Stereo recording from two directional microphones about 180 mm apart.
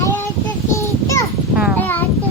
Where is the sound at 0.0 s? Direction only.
10° left (ahead or behind).